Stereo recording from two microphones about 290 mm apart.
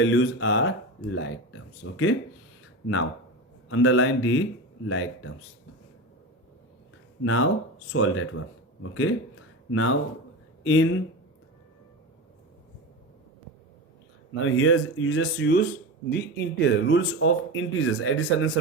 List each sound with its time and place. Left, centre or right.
0.0 s speech: left
3.7 s speech: left
7.3 s speech: left
14.3 s speech: left